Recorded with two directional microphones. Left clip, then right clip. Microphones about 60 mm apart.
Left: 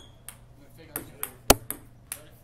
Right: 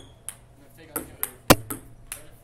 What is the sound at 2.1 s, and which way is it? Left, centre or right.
Ping, left.